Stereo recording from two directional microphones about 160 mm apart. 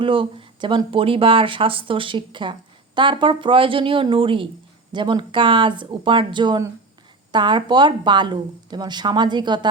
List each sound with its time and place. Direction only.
0.0 s a woman's voice: 35° right (ahead or behind)